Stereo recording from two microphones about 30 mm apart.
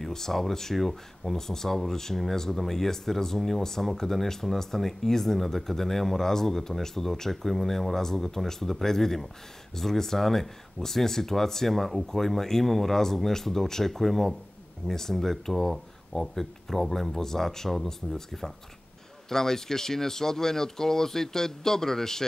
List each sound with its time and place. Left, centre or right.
0.1 s speech: centre
15.7 s speech: centre
18.0 s speech: centre
19.2 s speech: centre